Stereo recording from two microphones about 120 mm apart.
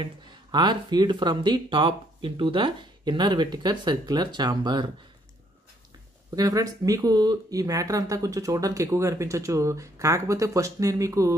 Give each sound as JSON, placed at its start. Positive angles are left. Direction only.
{"t": 0.0, "sound": "speech", "side_deg": -40}
{"t": 6.3, "sound": "speech", "side_deg": -30}